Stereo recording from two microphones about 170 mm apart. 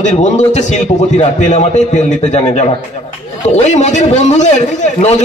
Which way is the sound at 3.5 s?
45° left (ahead or behind).